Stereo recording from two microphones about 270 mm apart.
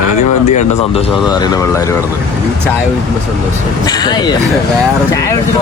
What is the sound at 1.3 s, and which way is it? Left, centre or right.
Speech, centre.